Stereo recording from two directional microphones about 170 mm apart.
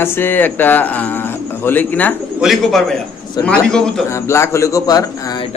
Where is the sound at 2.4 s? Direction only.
Centre (ahead or behind).